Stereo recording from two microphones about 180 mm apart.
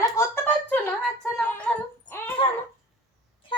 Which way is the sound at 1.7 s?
5° left (ahead or behind).